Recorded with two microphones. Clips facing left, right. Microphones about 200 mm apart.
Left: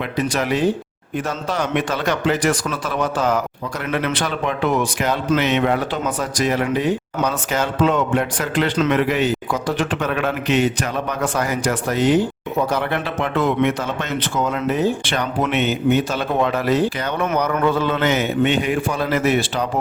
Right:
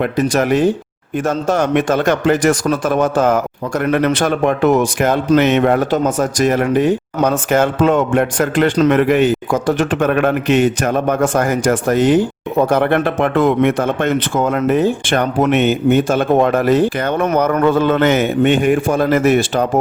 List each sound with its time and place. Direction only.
0.0 s speech: 50° right (ahead or behind)